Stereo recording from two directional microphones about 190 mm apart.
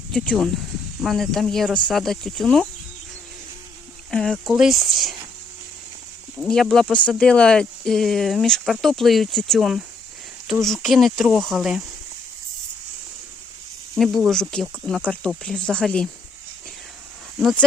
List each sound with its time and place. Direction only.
0.1 s speech: 5° left (ahead or behind)
4.1 s speech: 5° left (ahead or behind)
6.4 s speech: centre (ahead or behind)
13.9 s speech: centre (ahead or behind)